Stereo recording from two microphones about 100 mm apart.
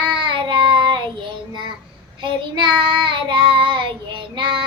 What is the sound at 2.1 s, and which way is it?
Child singing, 55° right (ahead or behind).